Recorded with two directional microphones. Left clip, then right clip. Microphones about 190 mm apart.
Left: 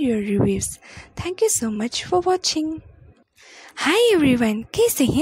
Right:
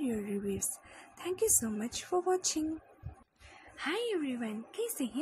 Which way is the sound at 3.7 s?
55° left (ahead or behind).